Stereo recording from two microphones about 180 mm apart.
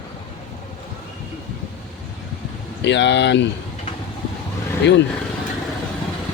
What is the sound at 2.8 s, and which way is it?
Speech, 75° left (ahead or behind).